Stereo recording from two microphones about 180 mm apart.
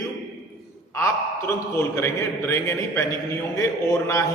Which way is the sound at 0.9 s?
15° left (ahead or behind).